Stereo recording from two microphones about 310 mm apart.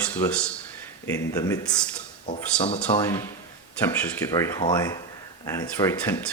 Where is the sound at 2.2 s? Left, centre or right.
Left.